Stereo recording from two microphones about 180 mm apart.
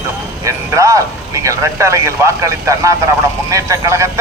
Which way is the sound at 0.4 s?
15° right (ahead or behind).